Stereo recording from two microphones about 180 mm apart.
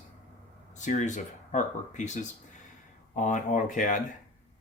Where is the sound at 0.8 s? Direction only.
40° left (ahead or behind).